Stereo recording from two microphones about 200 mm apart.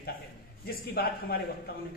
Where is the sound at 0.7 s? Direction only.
50° left (ahead or behind).